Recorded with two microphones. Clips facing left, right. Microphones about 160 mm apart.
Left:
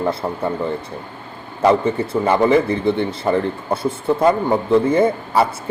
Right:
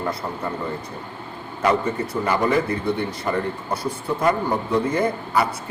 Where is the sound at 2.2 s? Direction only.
25° left (ahead or behind).